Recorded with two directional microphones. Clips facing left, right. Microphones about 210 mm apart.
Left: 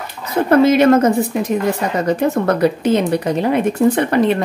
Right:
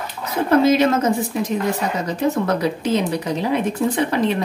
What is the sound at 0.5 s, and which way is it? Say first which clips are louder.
Speech: left 4 dB; 60° left (ahead or behind).